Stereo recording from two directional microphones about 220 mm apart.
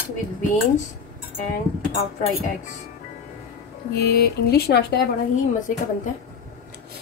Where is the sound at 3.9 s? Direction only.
45° left (ahead or behind).